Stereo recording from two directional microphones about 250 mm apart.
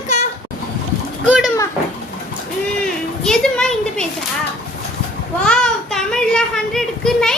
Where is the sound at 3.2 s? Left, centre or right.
Centre.